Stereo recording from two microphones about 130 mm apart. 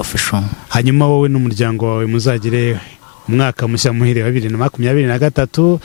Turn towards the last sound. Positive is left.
turn(degrees=15)  # may be behind; listen again after turning